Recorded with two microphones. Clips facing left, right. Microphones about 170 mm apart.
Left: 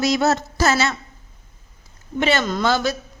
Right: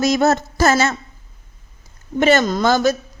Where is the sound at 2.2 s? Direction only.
45° right (ahead or behind).